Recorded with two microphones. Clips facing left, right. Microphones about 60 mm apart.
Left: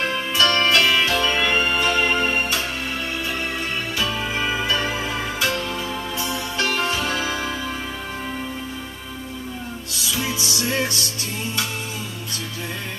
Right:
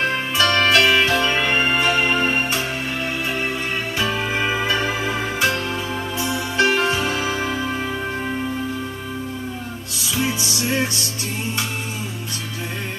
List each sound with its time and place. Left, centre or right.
0.1 s music: right
4.0 s music: right
10.1 s music: right